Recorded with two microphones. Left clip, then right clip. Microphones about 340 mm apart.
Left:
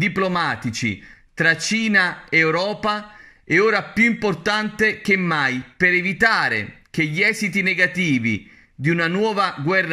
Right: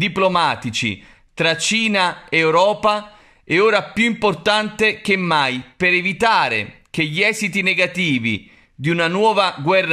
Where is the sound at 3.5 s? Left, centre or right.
Centre.